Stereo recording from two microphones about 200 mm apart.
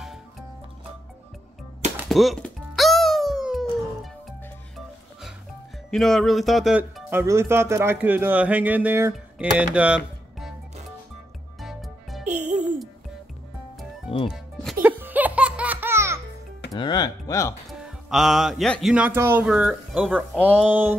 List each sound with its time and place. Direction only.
2.0 s music: centre (ahead or behind)
5.9 s speech: centre (ahead or behind)
11.6 s music: centre (ahead or behind)
12.3 s music: 35° right (ahead or behind)
14.3 s music: centre (ahead or behind)
16.7 s a sound: 20° left (ahead or behind)
17.7 s speech: centre (ahead or behind)